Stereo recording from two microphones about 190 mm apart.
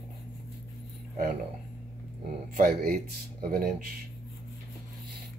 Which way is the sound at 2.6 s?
45° right (ahead or behind).